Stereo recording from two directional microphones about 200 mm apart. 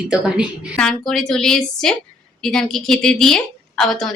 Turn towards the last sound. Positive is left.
turn(degrees=0)  # may be behind; listen again after turning